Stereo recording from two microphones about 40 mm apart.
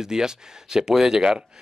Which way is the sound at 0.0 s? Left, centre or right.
Centre.